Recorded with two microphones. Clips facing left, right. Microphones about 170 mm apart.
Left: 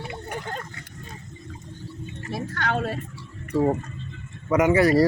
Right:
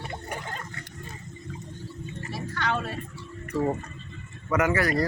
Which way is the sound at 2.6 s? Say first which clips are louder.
Left 2 dB; 45° left (ahead or behind).